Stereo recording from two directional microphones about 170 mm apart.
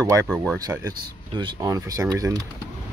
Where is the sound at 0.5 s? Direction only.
20° right (ahead or behind).